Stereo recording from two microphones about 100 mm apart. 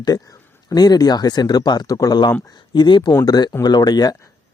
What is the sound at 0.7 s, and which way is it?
Speech, 40° left (ahead or behind).